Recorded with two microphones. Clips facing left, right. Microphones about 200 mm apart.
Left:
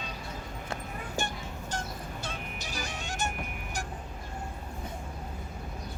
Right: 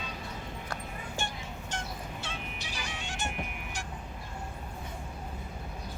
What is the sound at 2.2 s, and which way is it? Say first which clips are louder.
Music: left 2 dB; 40° left (ahead or behind).